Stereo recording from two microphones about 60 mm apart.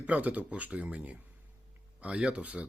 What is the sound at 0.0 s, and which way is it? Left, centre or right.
Speech, right.